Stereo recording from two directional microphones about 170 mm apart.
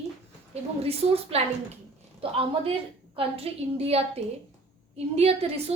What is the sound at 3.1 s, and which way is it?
A woman's voice, 35° right (ahead or behind).